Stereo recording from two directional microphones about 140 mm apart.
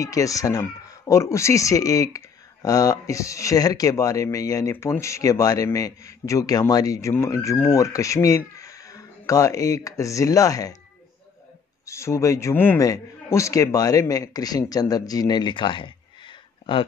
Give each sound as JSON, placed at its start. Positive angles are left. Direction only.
{"t": 0.0, "sound": "speech", "side_deg": 25}
{"t": 11.8, "sound": "speech", "side_deg": 20}